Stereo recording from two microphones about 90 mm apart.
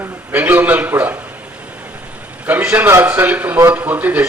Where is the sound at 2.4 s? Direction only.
20° right (ahead or behind).